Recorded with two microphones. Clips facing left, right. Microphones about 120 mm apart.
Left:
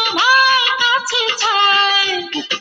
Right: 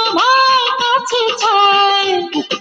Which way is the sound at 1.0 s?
55° right (ahead or behind).